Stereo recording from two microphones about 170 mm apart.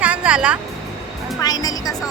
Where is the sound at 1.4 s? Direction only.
20° left (ahead or behind).